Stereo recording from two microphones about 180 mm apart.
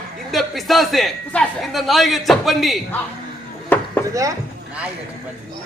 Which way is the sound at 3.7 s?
10° left (ahead or behind).